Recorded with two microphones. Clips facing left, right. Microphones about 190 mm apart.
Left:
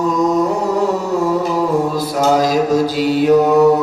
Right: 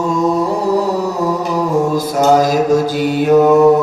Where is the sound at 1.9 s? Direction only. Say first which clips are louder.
Right 3 dB; 45° right (ahead or behind).